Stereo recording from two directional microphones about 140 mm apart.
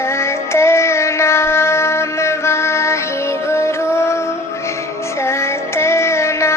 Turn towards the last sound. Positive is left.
turn(degrees=20)  # may be behind; listen again after turning